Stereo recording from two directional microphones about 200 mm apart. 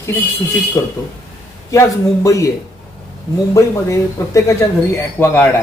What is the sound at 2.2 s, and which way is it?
Speech, 15° left (ahead or behind).